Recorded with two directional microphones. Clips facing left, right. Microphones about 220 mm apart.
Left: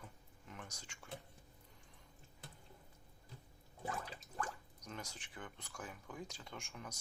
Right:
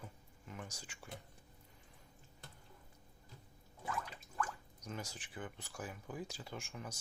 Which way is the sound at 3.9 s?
35° left (ahead or behind).